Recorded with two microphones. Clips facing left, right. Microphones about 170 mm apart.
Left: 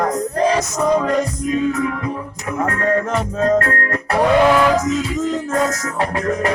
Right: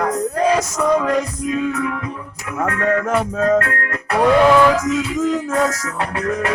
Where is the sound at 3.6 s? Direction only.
35° left (ahead or behind).